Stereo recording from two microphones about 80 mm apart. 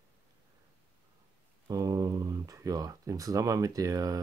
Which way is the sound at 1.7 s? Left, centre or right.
Right.